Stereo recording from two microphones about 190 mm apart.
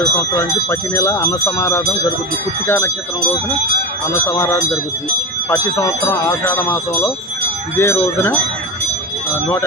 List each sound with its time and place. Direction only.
0.3 s speech: 15° left (ahead or behind)
4.1 s speech: 15° left (ahead or behind)